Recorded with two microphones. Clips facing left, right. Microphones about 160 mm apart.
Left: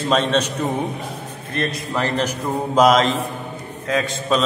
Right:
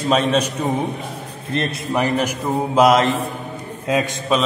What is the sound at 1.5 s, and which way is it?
A man's voice, 20° right (ahead or behind).